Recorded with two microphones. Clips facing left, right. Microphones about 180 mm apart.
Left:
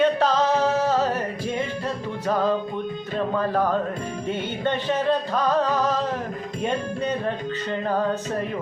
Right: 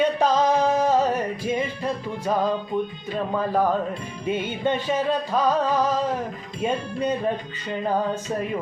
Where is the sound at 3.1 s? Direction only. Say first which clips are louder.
Even; 10° right (ahead or behind).